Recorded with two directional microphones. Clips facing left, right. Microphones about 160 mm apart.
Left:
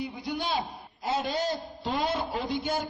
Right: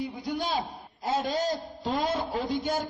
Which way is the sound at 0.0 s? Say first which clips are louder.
Right 1 dB; 40° right (ahead or behind).